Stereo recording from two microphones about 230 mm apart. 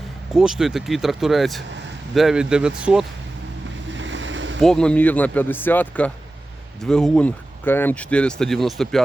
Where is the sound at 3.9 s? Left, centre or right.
Right.